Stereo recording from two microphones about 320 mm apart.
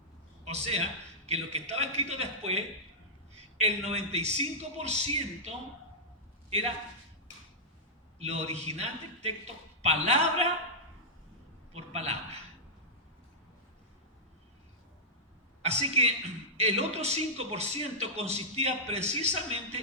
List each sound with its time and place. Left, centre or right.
0.4 s a man's voice: centre
8.2 s a man's voice: centre
11.7 s a man's voice: centre
15.6 s a man's voice: centre